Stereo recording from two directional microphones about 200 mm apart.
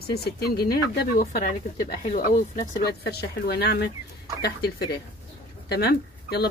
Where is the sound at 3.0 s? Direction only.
55° left (ahead or behind).